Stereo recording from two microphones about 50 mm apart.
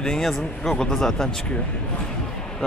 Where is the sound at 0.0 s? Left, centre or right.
Centre.